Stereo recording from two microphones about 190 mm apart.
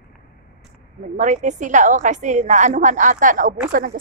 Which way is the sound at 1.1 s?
40° right (ahead or behind).